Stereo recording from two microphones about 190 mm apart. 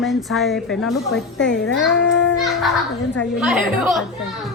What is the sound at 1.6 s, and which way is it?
Speech, 70° left (ahead or behind).